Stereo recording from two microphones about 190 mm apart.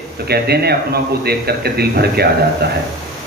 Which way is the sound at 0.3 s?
55° right (ahead or behind).